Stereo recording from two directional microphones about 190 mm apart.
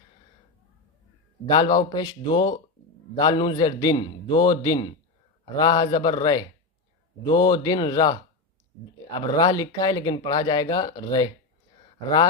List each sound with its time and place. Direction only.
1.5 s speech: 25° left (ahead or behind)